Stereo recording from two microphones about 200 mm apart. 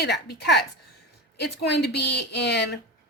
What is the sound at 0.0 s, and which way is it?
Speech, 55° left (ahead or behind).